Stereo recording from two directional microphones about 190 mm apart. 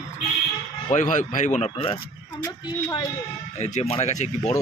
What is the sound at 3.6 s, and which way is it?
Speech, 35° left (ahead or behind).